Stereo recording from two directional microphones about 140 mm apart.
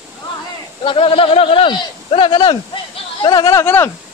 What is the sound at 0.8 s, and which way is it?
Speech, 40° left (ahead or behind).